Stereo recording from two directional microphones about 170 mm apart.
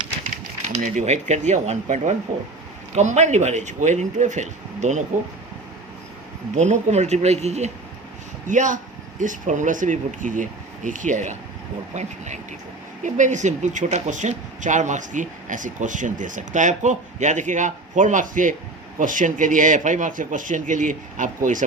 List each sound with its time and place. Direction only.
0.7 s speech: 45° right (ahead or behind)
6.6 s speech: 45° right (ahead or behind)